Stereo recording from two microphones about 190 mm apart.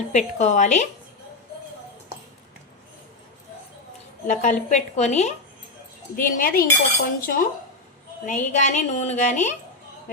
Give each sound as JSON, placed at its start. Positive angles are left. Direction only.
{"t": 0.1, "sound": "a woman's voice", "side_deg": 35}
{"t": 4.3, "sound": "a woman's voice", "side_deg": 40}
{"t": 6.1, "sound": "cutlery", "side_deg": 45}
{"t": 8.3, "sound": "a woman's voice", "side_deg": 40}